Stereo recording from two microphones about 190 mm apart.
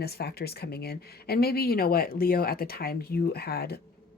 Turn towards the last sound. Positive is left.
turn(degrees=55)  # may be behind; listen again after turning